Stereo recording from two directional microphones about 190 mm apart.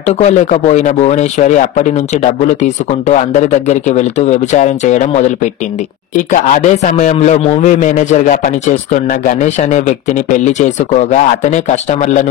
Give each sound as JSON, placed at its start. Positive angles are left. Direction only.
{"t": 0.0, "sound": "a man's voice", "side_deg": 35}
{"t": 3.1, "sound": "a man's voice", "side_deg": 40}